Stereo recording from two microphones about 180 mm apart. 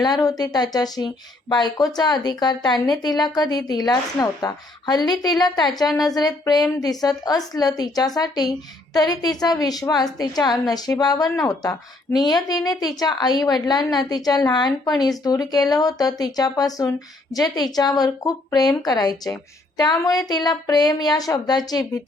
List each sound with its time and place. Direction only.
0.0 s a woman's voice: 20° left (ahead or behind)